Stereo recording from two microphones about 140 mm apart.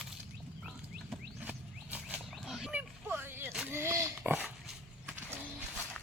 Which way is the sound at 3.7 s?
15° right (ahead or behind).